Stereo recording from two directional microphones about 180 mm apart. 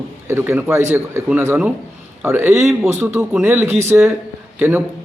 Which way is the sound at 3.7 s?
40° right (ahead or behind).